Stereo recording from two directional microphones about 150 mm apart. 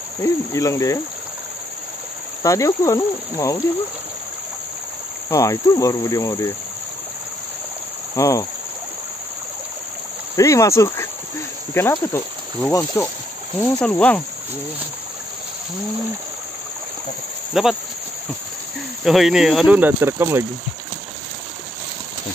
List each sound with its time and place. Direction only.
0.2 s speech: 20° left (ahead or behind)
2.4 s speech: 20° left (ahead or behind)
5.3 s speech: 20° left (ahead or behind)
8.2 s speech: 20° left (ahead or behind)
10.3 s speech: 20° left (ahead or behind)
17.6 s speech: 5° right (ahead or behind)
19.0 s speech: centre (ahead or behind)
19.8 s speech: 15° right (ahead or behind)